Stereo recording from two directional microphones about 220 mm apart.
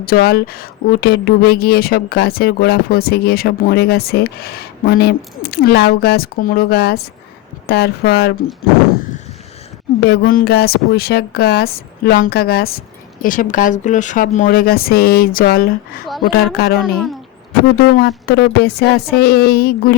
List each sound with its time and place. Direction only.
0.0 s speech: 45° left (ahead or behind)
10.1 s speech: 45° left (ahead or behind)